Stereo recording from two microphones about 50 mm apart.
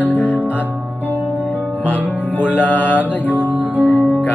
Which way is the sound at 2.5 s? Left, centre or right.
Left.